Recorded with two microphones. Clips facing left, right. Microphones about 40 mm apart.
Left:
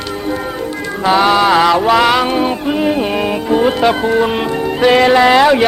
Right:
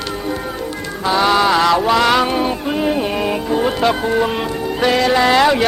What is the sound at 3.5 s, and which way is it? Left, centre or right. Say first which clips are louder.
Speech: left 5 dB; centre.